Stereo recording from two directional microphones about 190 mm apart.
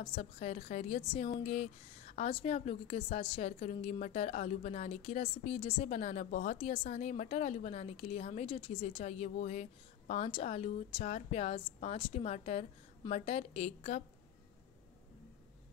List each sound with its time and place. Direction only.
0.0 s a woman's voice: 30° left (ahead or behind)